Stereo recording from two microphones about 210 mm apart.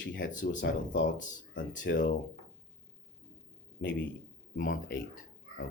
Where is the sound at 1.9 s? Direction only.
55° left (ahead or behind).